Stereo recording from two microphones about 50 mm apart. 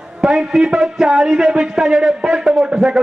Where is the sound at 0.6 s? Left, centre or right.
Centre.